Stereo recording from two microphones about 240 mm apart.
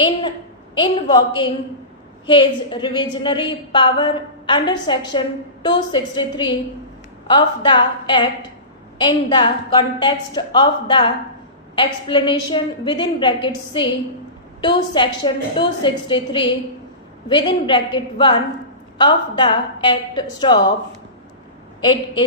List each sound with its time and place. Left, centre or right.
0.0 s a woman's voice: left